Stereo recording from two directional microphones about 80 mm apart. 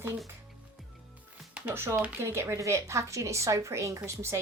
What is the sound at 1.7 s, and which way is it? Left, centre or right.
Speech, right.